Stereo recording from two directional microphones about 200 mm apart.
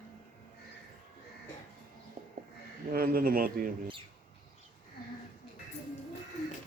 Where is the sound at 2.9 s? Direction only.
45° right (ahead or behind).